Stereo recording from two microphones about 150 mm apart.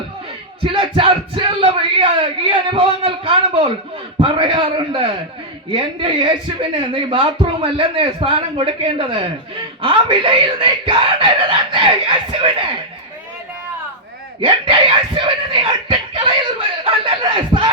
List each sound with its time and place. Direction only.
0.6 s a sound: 35° right (ahead or behind)
4.2 s a woman's voice: 35° right (ahead or behind)
14.4 s a woman's voice: 35° right (ahead or behind)